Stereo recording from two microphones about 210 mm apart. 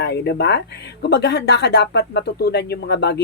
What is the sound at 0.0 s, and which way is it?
Speech, 50° left (ahead or behind).